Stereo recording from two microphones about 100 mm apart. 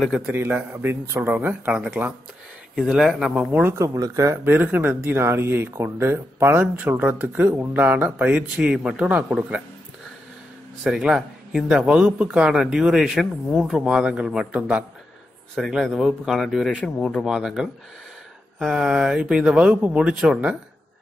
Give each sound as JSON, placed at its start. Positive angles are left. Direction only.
{"t": 0.3, "sound": "a man's voice", "side_deg": -20}
{"t": 3.3, "sound": "speech", "side_deg": -20}
{"t": 4.5, "sound": "speech", "side_deg": -20}
{"t": 11.0, "sound": "a man's voice", "side_deg": -5}
{"t": 17.2, "sound": "a man's voice", "side_deg": -5}